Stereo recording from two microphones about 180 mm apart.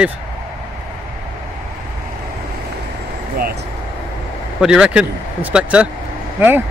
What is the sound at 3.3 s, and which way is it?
Vehicle, 60° right (ahead or behind).